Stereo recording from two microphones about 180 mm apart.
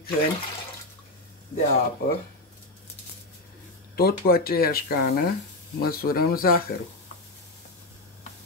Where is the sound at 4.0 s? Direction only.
55° left (ahead or behind).